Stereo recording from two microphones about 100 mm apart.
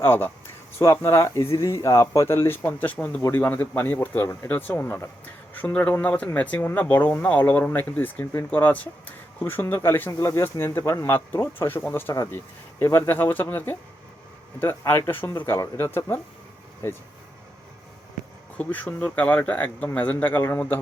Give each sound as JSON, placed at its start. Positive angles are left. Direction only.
{"t": 0.0, "sound": "speech", "side_deg": 20}
{"t": 2.6, "sound": "speech", "side_deg": 15}
{"t": 18.5, "sound": "speech", "side_deg": 15}